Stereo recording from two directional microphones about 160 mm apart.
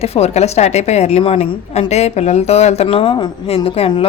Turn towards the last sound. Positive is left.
turn(degrees=35)  # may be behind; listen again after turning